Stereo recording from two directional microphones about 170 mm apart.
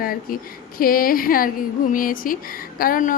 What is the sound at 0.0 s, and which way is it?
A woman's voice, 60° left (ahead or behind).